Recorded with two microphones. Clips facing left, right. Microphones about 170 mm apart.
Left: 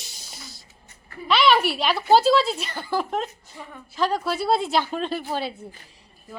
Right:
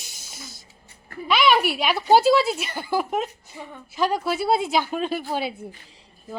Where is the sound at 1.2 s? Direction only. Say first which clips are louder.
Even; 10° right (ahead or behind).